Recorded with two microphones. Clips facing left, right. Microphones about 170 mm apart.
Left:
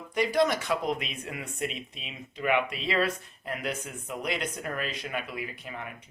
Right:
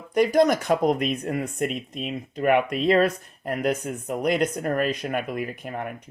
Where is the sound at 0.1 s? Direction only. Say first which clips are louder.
Right 6 dB; 45° right (ahead or behind).